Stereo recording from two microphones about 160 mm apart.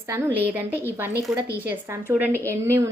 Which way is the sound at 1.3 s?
5° right (ahead or behind).